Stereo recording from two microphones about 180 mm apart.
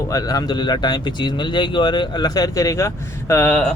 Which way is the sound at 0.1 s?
20° left (ahead or behind).